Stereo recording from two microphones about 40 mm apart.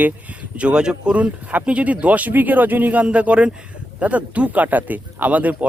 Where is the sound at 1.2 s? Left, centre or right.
Right.